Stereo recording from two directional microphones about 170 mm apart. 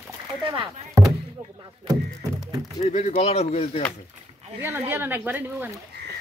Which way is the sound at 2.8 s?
40° left (ahead or behind).